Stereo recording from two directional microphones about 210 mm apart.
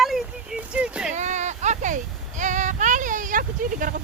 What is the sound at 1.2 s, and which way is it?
Child singing, 35° right (ahead or behind).